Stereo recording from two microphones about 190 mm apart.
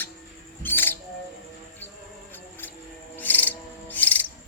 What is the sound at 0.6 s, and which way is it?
Music, 10° left (ahead or behind).